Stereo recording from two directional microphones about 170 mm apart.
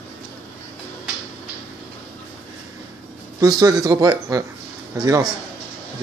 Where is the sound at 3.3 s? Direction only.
20° right (ahead or behind).